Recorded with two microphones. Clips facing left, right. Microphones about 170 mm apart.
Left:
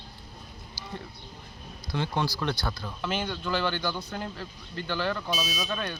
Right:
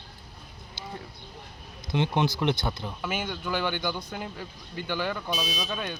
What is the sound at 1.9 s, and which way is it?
Speech, 20° right (ahead or behind).